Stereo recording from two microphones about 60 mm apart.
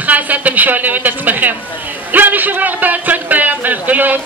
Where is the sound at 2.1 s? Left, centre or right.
Right.